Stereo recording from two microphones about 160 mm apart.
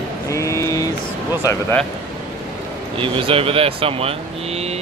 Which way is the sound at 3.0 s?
35° right (ahead or behind).